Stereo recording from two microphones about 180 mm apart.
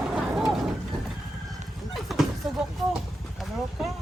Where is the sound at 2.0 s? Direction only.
Centre (ahead or behind).